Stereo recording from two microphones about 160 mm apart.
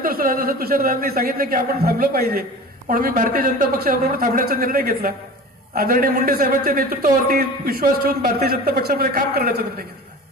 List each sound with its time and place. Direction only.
0.0 s a man's voice: 65° right (ahead or behind)